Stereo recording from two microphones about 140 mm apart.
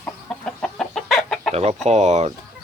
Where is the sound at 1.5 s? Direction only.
50° right (ahead or behind).